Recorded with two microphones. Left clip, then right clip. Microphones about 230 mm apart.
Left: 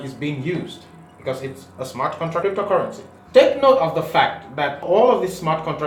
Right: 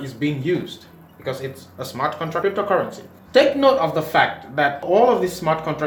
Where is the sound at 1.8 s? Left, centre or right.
Right.